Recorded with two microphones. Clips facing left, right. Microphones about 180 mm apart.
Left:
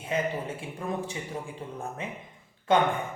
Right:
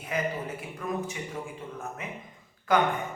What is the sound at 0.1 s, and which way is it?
A man's voice, 25° left (ahead or behind).